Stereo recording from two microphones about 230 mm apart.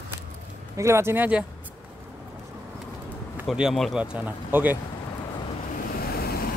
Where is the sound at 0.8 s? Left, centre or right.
Centre.